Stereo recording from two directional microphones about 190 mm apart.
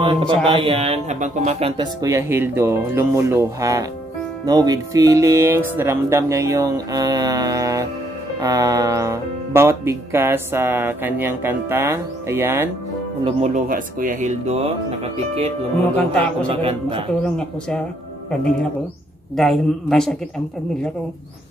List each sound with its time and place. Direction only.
0.0 s mantra: 25° right (ahead or behind)
0.5 s speech: 30° right (ahead or behind)
2.0 s speech: 15° right (ahead or behind)
13.2 s speech: 40° right (ahead or behind)
15.9 s a man's voice: 5° left (ahead or behind)
19.3 s a man's voice: centre (ahead or behind)